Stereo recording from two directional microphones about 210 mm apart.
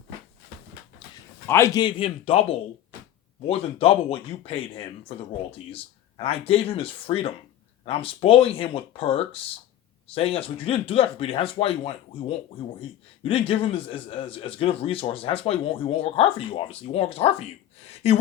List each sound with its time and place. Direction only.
1.5 s speech: 15° left (ahead or behind)
13.2 s speech: 25° left (ahead or behind)